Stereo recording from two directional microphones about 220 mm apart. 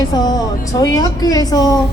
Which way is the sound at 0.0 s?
20° left (ahead or behind).